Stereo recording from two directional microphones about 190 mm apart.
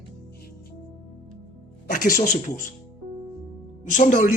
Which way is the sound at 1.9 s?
45° left (ahead or behind).